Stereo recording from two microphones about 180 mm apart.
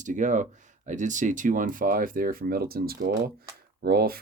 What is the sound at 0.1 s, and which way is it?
Speech, 45° right (ahead or behind).